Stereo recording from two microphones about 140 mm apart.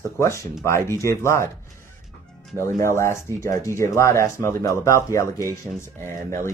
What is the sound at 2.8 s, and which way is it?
Speech, 20° left (ahead or behind).